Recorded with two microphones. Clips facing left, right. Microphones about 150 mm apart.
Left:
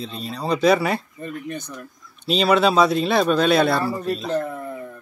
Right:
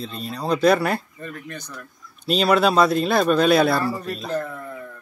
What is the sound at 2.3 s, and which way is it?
Speech, centre (ahead or behind).